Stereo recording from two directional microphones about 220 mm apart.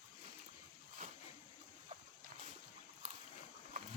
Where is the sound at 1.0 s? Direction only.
35° right (ahead or behind).